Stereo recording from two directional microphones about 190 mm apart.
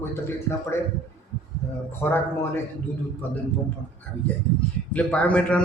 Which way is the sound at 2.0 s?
10° left (ahead or behind).